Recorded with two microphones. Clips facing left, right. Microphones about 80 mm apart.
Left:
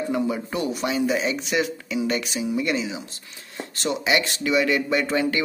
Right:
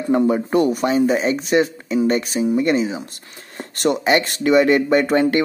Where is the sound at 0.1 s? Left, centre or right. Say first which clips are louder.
Right 13 dB; right.